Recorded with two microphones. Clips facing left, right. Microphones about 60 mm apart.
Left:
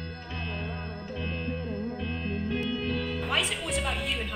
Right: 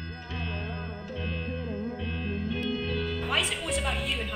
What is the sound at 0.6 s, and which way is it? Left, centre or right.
Music, centre.